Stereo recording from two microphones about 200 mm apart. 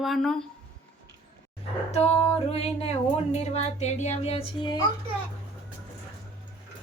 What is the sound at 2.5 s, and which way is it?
Speech, 30° left (ahead or behind).